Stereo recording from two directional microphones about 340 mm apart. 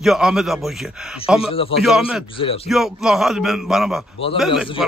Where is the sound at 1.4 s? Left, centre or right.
Centre.